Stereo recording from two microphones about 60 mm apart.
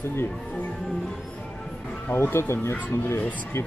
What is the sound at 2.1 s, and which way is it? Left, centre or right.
Speech, left.